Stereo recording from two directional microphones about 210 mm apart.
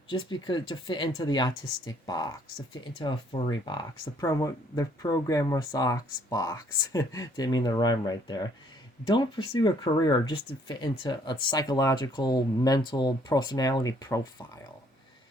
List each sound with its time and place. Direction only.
0.1 s speech: 20° left (ahead or behind)